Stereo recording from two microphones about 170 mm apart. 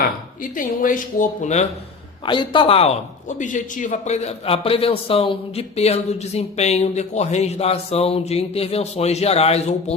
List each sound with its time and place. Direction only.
0.5 s speech: 50° left (ahead or behind)
2.2 s a man's voice: 30° left (ahead or behind)